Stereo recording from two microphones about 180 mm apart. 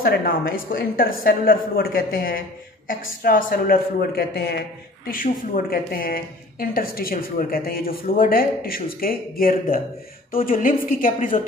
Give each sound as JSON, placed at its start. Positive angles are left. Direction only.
{"t": 0.0, "sound": "a man's voice", "side_deg": 55}